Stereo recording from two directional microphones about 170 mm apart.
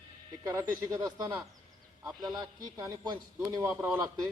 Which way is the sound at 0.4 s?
20° right (ahead or behind).